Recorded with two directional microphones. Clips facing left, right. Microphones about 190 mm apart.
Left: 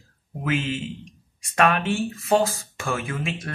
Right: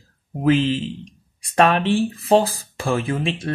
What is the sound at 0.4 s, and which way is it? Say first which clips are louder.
Speech: right 8 dB; 35° right (ahead or behind).